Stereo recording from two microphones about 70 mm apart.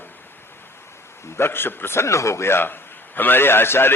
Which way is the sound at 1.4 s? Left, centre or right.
Left.